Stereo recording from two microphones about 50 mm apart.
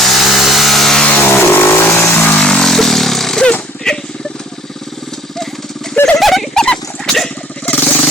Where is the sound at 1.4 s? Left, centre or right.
Left.